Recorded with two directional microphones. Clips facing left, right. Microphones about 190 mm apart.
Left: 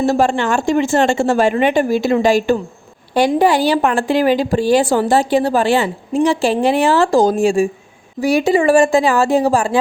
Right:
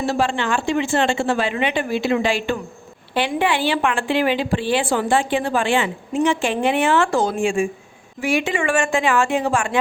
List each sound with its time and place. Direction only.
0.0 s a woman's voice: 45° left (ahead or behind)